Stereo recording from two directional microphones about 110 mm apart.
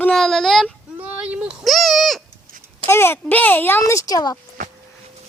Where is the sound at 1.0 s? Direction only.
10° right (ahead or behind).